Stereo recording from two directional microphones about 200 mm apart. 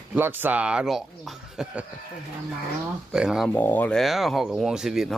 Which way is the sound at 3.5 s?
10° left (ahead or behind).